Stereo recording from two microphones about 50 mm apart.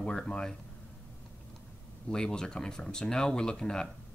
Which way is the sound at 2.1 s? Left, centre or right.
Centre.